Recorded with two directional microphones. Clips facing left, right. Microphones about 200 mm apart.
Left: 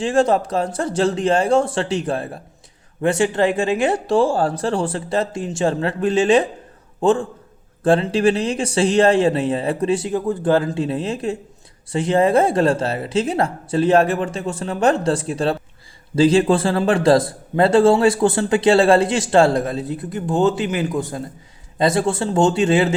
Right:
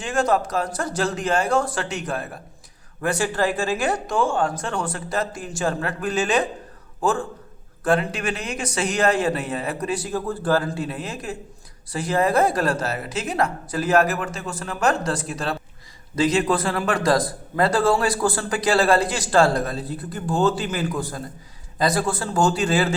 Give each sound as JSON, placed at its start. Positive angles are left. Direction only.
{"t": 0.0, "sound": "a man's voice", "side_deg": 30}